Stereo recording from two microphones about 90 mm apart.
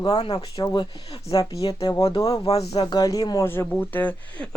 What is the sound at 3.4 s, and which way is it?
Speech, 30° left (ahead or behind).